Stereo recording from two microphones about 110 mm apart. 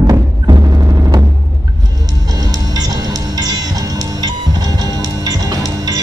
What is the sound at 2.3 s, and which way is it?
Music, 35° right (ahead or behind).